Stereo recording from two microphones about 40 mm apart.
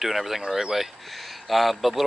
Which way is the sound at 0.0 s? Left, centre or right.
Centre.